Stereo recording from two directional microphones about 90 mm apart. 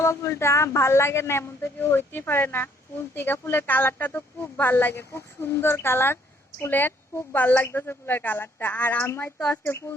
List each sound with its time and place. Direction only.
0.0 s a woman's voice: 30° left (ahead or behind)